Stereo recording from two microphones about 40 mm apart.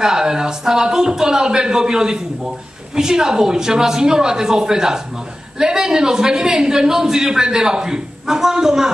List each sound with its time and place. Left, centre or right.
0.0 s a man's voice: centre